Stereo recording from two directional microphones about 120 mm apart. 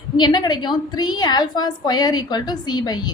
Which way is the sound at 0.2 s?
40° left (ahead or behind).